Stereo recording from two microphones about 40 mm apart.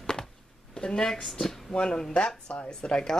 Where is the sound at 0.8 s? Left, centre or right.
Centre.